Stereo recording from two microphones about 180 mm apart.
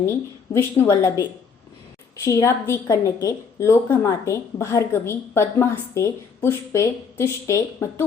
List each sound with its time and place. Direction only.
0.5 s a woman's voice: 15° left (ahead or behind)